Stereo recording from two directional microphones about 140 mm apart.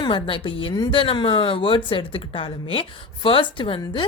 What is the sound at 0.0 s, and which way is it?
A woman's voice, 35° left (ahead or behind).